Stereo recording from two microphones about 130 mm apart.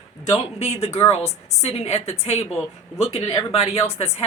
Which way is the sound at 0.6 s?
50° left (ahead or behind).